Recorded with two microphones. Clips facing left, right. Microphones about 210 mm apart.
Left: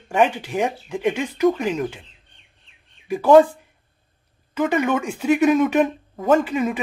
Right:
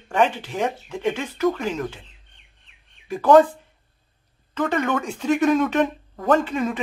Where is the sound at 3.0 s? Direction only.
10° left (ahead or behind).